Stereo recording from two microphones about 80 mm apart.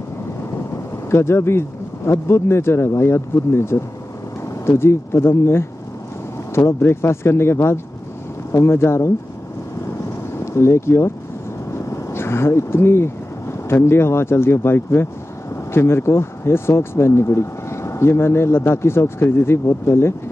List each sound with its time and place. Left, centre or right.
1.1 s speech: left
10.4 s speech: left